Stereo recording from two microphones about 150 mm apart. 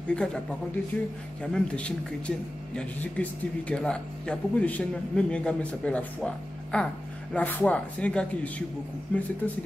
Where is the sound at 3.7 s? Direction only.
5° left (ahead or behind).